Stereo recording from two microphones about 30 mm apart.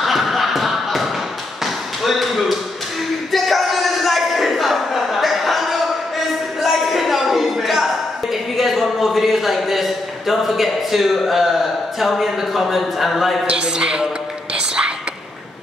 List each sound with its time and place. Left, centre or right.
0.0 s a sound: centre
11.2 s a man's voice: centre
13.5 s a man's voice: right